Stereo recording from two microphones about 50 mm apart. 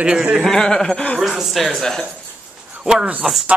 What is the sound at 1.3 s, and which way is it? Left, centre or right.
Speech, centre.